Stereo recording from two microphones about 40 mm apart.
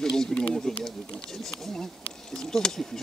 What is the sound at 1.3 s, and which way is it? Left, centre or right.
Speech, centre.